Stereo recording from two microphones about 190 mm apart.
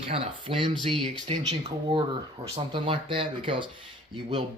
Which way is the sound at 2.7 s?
25° right (ahead or behind).